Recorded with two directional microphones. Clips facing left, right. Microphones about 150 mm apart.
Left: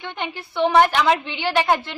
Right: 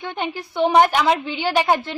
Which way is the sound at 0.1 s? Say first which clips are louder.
Right 3 dB; 40° right (ahead or behind).